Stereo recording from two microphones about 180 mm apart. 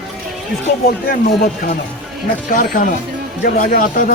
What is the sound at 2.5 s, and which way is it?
Speech, 45° left (ahead or behind).